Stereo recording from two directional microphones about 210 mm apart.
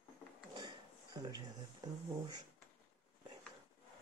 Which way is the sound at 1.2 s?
20° right (ahead or behind).